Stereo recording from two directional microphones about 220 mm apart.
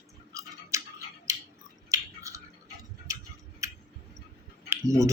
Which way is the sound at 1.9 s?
15° right (ahead or behind).